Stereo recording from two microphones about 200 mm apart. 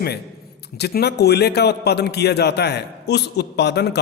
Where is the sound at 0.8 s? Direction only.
55° left (ahead or behind).